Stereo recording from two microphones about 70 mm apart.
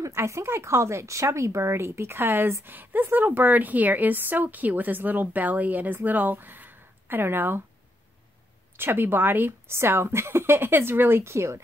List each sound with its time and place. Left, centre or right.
0.0 s speech: right
8.7 s a woman's voice: right